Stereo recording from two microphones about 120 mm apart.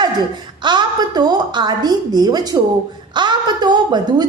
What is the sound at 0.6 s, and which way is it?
A woman's voice, 40° right (ahead or behind).